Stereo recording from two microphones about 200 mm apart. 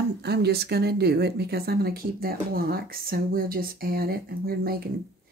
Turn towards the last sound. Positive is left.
turn(degrees=-50)  # may be behind; listen again after turning